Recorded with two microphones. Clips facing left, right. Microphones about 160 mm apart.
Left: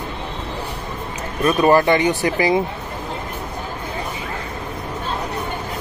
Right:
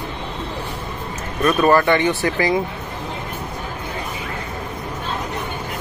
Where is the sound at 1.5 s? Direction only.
15° left (ahead or behind).